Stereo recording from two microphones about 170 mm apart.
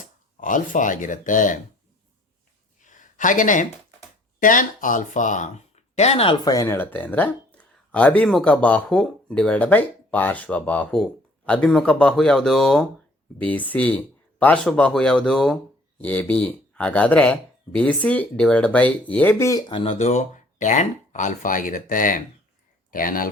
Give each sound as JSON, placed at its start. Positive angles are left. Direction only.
{"t": 0.0, "sound": "speech", "side_deg": 50}
{"t": 2.8, "sound": "a sound", "side_deg": 50}
{"t": 4.4, "sound": "speech", "side_deg": 50}
{"t": 6.4, "sound": "speech", "side_deg": 20}